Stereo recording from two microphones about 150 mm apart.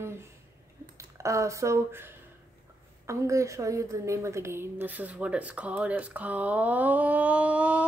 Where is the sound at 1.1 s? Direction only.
20° right (ahead or behind).